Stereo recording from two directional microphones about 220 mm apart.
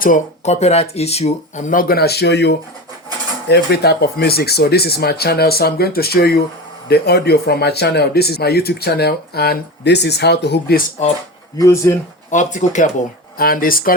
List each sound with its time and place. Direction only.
0.0 s speech: 35° left (ahead or behind)
11.5 s speech: 15° left (ahead or behind)
12.3 s speech: 35° left (ahead or behind)